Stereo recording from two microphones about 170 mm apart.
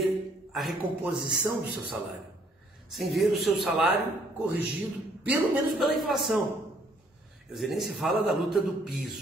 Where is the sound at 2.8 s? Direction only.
Centre (ahead or behind).